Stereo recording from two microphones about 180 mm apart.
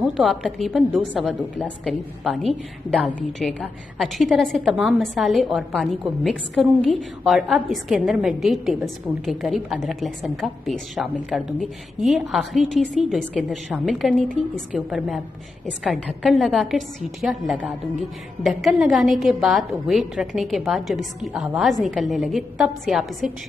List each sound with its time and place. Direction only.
0.0 s a woman's voice: centre (ahead or behind)